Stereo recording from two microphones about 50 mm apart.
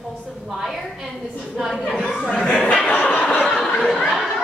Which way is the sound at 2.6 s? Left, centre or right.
Centre.